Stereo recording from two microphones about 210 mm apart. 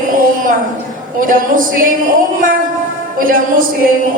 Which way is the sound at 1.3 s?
40° right (ahead or behind).